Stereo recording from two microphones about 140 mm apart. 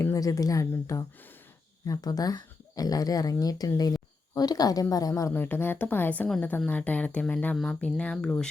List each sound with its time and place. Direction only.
0.0 s speech: 25° left (ahead or behind); by 8.4 s 5° left (ahead or behind)